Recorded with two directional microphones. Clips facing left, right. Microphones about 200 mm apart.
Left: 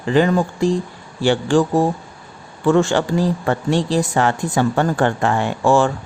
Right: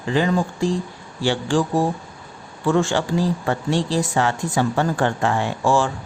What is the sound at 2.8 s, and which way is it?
A woman's voice, 60° left (ahead or behind).